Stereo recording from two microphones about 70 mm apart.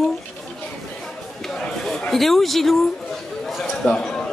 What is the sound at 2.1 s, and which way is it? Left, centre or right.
Speech, centre.